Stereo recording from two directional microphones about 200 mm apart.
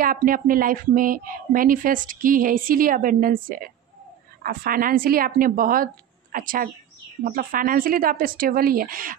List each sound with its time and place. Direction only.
0.0 s a woman's voice: 45° right (ahead or behind)